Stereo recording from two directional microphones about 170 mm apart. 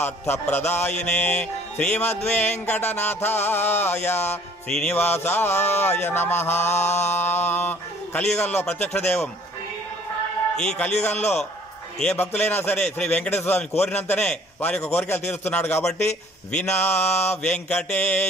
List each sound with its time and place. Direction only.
0.0 s music: 10° left (ahead or behind)
10.6 s a man's voice: 5° left (ahead or behind)
11.1 s a man's voice: 40° left (ahead or behind)
12.0 s music: 5° left (ahead or behind)